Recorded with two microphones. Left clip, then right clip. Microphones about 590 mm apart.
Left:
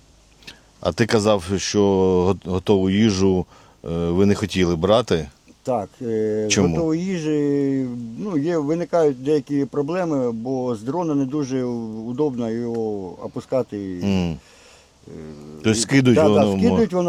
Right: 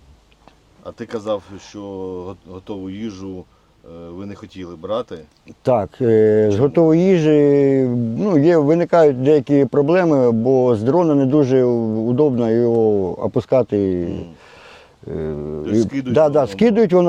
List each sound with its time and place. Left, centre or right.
0.8 s speech: left
5.6 s speech: right
15.1 s speech: right
15.6 s speech: left
16.1 s speech: right